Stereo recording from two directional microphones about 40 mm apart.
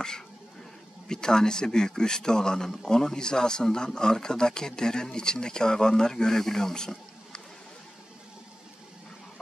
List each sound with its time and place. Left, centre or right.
1.0 s speech: centre